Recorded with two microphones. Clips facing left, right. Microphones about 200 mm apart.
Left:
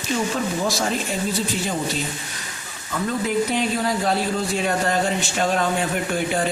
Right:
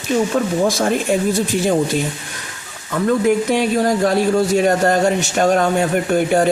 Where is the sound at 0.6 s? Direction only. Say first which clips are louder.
Right 7 dB; 55° right (ahead or behind).